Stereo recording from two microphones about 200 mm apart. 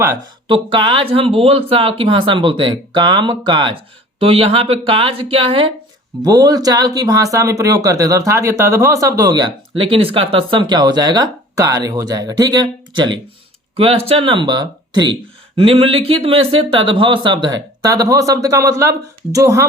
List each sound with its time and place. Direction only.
0.4 s speech: 25° right (ahead or behind)